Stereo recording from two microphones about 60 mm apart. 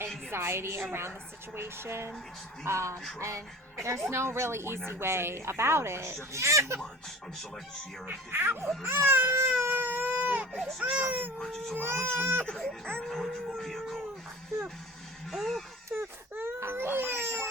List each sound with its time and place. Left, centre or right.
0.3 s a woman's voice: right
2.6 s a woman's voice: right
8.0 s speech: right
9.3 s baby cry: right
10.5 s speech: centre
10.8 s speech: right
11.3 s speech: centre
11.8 s speech: right
12.5 s baby cry: centre
13.1 s speech: centre
15.3 s speech: centre
15.9 s wail: right
16.6 s baby cry: right